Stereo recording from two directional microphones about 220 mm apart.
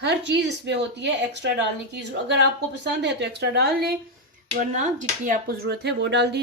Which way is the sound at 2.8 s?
50° right (ahead or behind).